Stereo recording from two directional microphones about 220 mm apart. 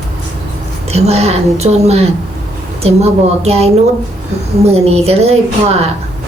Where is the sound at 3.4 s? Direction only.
30° right (ahead or behind).